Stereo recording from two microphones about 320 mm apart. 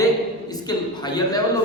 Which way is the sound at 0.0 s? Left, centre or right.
Centre.